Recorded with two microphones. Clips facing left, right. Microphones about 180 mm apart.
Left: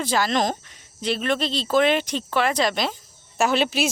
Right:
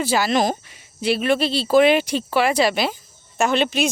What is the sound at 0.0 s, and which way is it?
Speech, 5° right (ahead or behind).